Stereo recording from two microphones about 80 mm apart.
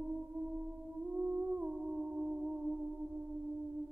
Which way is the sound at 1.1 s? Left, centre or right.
Centre.